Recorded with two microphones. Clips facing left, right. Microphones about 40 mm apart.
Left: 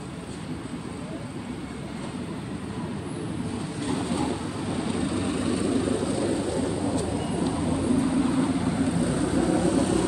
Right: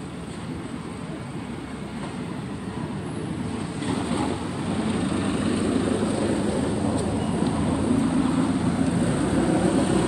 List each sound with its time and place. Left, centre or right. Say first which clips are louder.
3.9 s vehicle: right 1 dB; right
8.2 s vehicle: right 1 dB; centre
8.9 s vehicle: right 2 dB; right